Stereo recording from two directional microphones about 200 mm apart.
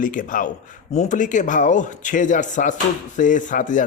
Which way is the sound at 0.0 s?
40° left (ahead or behind).